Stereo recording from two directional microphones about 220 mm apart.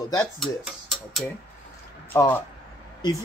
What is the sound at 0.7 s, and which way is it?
Speech, centre (ahead or behind).